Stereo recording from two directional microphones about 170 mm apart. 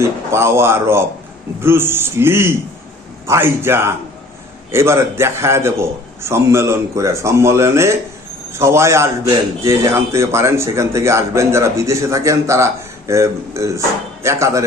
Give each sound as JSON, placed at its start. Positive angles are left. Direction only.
{"t": 0.0, "sound": "a man's voice", "side_deg": -15}